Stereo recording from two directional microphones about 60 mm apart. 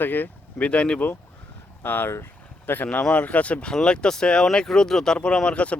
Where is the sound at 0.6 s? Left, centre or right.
Centre.